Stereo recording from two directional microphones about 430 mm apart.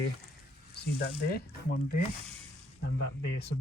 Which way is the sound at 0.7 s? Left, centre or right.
Left.